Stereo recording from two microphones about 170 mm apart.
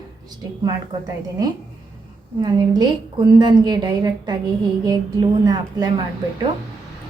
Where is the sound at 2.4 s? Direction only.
25° right (ahead or behind).